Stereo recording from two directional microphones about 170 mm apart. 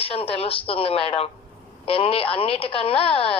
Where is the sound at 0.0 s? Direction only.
35° left (ahead or behind).